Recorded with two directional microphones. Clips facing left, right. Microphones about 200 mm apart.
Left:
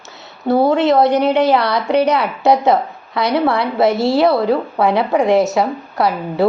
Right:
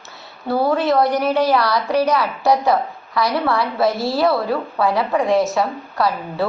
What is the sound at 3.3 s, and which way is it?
A woman's voice, 25° left (ahead or behind).